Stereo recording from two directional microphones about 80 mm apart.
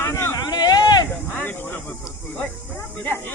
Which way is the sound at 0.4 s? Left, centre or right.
Left.